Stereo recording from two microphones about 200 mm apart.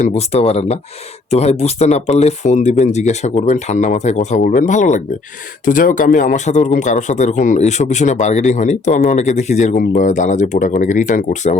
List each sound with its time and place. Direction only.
0.0 s a man's voice: 30° left (ahead or behind)